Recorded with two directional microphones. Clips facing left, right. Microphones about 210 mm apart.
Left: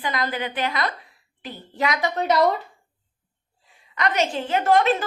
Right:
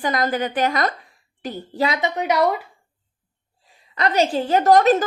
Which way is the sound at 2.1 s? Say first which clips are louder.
Even; 10° right (ahead or behind).